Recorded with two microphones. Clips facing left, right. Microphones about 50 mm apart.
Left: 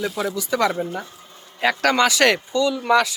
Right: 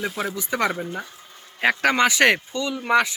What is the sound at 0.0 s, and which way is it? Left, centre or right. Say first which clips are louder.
Speech: left 3 dB; right.